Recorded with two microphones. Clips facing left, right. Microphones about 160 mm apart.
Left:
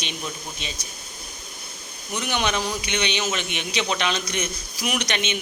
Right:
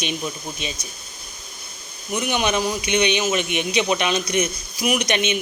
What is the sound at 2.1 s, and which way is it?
A man's voice, 10° right (ahead or behind).